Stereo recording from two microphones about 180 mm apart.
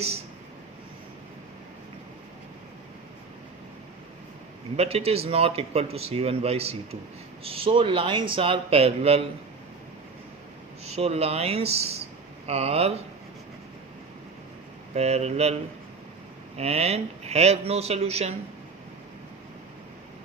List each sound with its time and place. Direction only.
4.8 s speech: 35° right (ahead or behind)
10.8 s speech: 35° right (ahead or behind)
14.9 s speech: 35° right (ahead or behind)
16.6 s speech: 35° right (ahead or behind)